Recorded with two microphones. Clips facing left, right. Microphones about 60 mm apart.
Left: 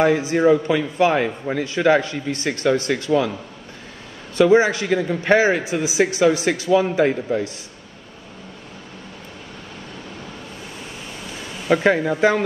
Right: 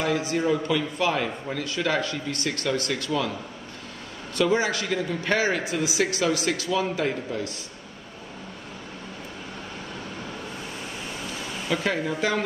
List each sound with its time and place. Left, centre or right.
0.0 s a man's voice: left
0.4 s a man's voice: left
0.7 s a man's voice: left
4.4 s a man's voice: left
11.7 s speech: left